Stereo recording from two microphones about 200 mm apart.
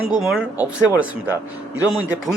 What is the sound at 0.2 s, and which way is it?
Speech, centre (ahead or behind).